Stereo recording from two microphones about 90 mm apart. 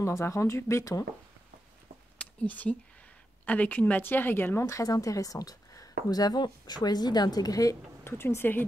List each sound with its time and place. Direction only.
0.0 s speech: 35° left (ahead or behind)
2.4 s a woman's voice: 20° left (ahead or behind)
4.6 s speech: 40° left (ahead or behind)
8.0 s a woman's voice: 25° left (ahead or behind)